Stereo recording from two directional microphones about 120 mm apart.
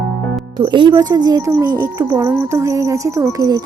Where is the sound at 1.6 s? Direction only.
30° right (ahead or behind).